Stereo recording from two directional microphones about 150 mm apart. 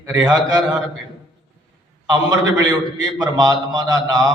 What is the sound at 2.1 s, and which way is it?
A man's voice, 25° right (ahead or behind).